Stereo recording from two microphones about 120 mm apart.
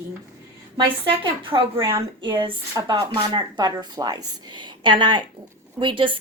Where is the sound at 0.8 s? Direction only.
45° right (ahead or behind).